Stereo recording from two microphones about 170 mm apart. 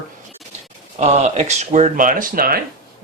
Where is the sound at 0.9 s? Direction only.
40° right (ahead or behind).